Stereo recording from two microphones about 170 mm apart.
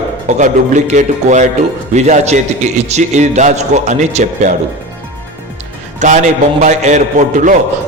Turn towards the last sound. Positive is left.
turn(degrees=-45)  # may be behind; listen again after turning